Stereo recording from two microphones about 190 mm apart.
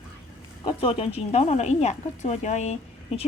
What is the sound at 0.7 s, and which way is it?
Speech, 30° left (ahead or behind).